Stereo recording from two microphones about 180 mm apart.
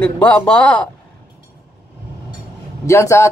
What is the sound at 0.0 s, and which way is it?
Speech, 5° left (ahead or behind).